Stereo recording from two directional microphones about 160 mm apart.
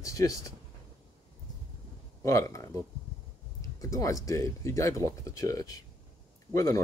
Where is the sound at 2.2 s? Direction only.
20° left (ahead or behind).